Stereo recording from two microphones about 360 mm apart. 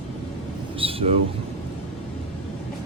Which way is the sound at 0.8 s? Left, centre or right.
Centre.